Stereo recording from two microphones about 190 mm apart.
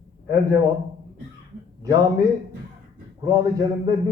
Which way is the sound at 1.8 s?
20° right (ahead or behind).